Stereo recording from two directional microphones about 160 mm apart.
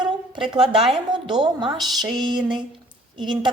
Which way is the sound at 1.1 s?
30° right (ahead or behind).